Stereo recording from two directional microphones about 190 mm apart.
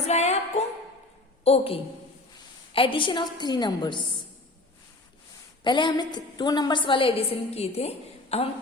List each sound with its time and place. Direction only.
0.1 s music: 35° left (ahead or behind)
0.6 s a sound: 35° left (ahead or behind)
1.5 s a woman's voice: 30° left (ahead or behind)
5.6 s a woman's voice: 25° left (ahead or behind)